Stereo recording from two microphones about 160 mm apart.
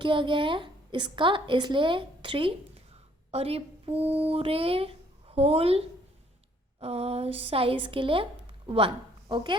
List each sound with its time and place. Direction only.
0.0 s a woman's voice: 30° right (ahead or behind)